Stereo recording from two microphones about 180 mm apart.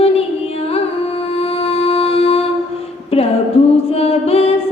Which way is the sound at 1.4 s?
35° left (ahead or behind).